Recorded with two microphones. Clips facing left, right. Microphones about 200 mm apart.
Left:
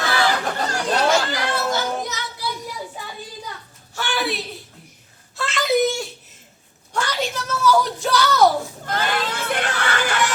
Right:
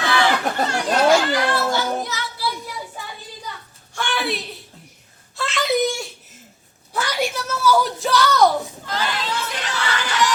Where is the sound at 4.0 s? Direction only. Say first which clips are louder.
Even; centre (ahead or behind).